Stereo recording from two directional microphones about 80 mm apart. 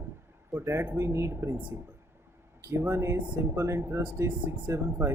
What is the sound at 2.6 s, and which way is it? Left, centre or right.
Speech, right.